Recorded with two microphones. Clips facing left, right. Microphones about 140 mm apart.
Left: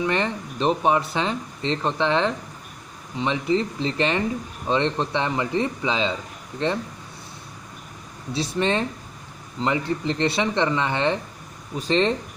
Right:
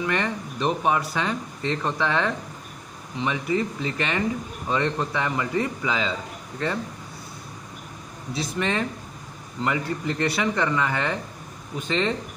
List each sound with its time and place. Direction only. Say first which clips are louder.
0.0 s speech: left 2 dB; 25° left (ahead or behind)
8.3 s speech: left 3 dB; 30° left (ahead or behind)